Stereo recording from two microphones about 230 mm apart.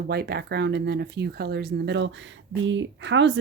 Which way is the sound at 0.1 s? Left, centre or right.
Right.